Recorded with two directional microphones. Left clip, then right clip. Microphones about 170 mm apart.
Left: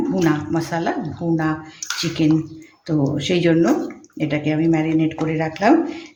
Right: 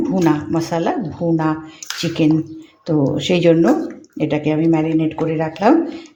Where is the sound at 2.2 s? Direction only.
25° right (ahead or behind).